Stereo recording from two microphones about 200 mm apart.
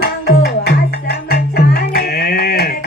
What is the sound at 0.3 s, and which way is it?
Music, 50° left (ahead or behind).